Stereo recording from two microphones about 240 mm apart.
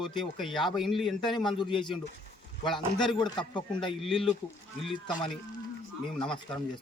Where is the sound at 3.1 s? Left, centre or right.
Centre.